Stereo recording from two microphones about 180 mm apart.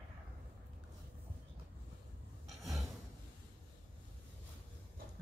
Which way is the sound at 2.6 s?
Centre (ahead or behind).